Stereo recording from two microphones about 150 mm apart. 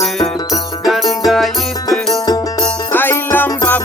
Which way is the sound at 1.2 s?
Centre (ahead or behind).